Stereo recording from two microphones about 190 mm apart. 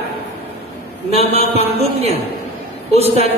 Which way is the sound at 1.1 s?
30° right (ahead or behind).